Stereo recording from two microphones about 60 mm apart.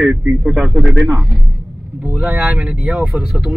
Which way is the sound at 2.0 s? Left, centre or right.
Right.